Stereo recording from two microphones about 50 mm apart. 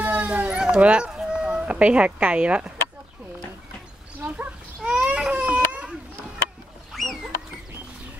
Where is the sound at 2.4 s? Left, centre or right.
Right.